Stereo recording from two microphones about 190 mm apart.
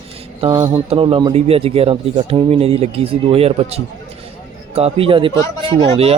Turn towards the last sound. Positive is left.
turn(degrees=-30)  # may be behind; listen again after turning